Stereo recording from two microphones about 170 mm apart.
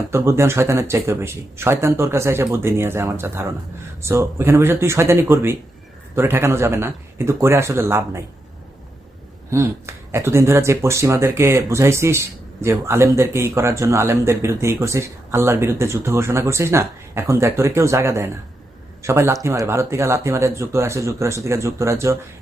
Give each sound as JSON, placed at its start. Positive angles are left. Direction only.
{"t": 0.1, "sound": "speech", "side_deg": -15}
{"t": 9.5, "sound": "speech", "side_deg": -15}